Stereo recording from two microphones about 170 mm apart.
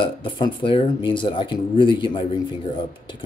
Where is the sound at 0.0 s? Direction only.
30° left (ahead or behind).